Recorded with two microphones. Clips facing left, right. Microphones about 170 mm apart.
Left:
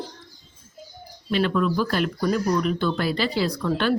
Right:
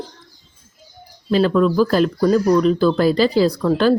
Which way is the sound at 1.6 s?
35° right (ahead or behind).